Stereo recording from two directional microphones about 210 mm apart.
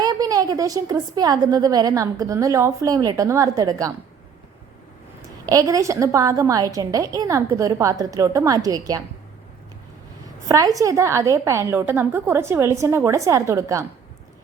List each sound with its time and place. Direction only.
0.0 s a woman's voice: 20° right (ahead or behind)
5.5 s a woman's voice: 15° right (ahead or behind)
10.5 s a woman's voice: 15° right (ahead or behind)